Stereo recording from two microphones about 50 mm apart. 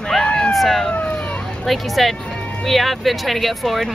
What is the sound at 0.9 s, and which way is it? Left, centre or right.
Speech, left.